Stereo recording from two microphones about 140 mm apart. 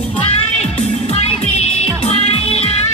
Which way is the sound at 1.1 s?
50° left (ahead or behind).